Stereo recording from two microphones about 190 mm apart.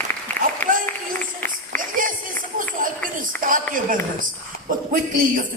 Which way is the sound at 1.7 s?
45° right (ahead or behind).